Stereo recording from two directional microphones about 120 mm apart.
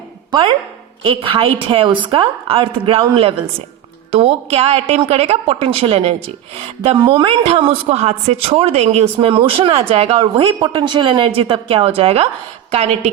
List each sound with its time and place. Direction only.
0.3 s a man's voice: 45° right (ahead or behind)
6.9 s a man's voice: 40° right (ahead or behind); by 13.1 s 60° right (ahead or behind)